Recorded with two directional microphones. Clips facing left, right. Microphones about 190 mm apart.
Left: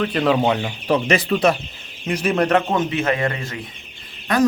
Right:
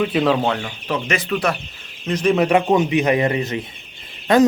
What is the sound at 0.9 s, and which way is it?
Speech, 35° left (ahead or behind).